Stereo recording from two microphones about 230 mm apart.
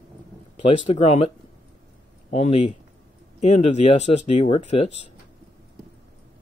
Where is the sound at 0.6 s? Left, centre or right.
Left.